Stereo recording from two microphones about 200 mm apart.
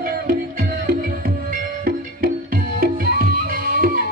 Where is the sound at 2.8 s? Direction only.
50° right (ahead or behind).